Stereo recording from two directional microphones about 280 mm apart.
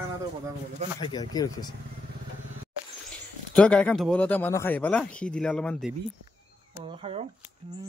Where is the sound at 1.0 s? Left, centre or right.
Centre.